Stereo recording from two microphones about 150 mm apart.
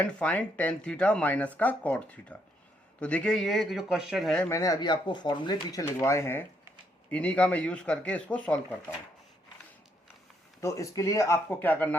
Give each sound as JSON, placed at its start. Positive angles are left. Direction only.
{"t": 0.0, "sound": "speech", "side_deg": 5}
{"t": 4.4, "sound": "speech", "side_deg": 20}
{"t": 5.8, "sound": "speech", "side_deg": 20}
{"t": 10.6, "sound": "speech", "side_deg": 20}